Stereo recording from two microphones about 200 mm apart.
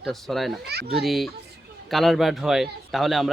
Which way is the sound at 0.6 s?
55° right (ahead or behind).